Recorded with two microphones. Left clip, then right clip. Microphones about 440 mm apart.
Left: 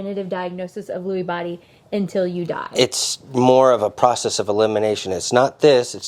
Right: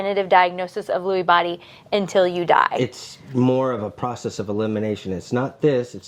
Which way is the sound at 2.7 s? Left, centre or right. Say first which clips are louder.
Left 6 dB; left.